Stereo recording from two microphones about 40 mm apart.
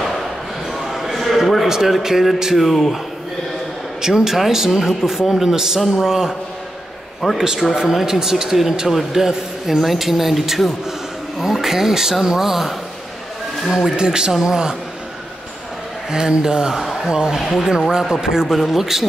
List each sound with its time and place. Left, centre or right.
0.7 s a sound: centre
1.7 s speech: centre
4.0 s speech: centre
7.3 s speech: centre
13.9 s speech: right
16.1 s speech: centre